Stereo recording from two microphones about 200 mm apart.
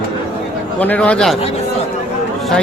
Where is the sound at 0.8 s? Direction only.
5° left (ahead or behind).